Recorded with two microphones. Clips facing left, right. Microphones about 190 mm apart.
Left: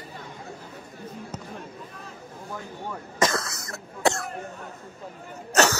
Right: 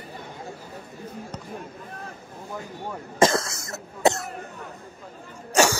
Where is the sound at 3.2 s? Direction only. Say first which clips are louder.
Right 5 dB; 25° right (ahead or behind).